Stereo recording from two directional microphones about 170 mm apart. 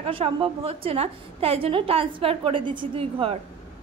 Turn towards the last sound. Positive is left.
turn(degrees=-35)  # may be behind; listen again after turning